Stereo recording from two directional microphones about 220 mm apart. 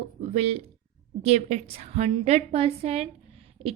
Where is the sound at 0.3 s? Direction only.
25° right (ahead or behind).